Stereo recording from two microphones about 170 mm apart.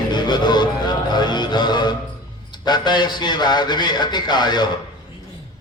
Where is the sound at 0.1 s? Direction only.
25° left (ahead or behind).